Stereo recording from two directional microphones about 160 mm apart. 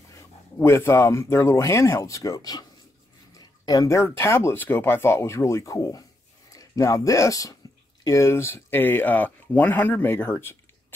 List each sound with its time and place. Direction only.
0.6 s speech: 15° left (ahead or behind)
3.3 s a sound: 25° left (ahead or behind)
4.2 s speech: 15° left (ahead or behind)